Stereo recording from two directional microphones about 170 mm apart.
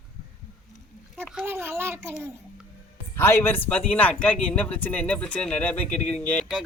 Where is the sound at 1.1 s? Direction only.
Centre (ahead or behind).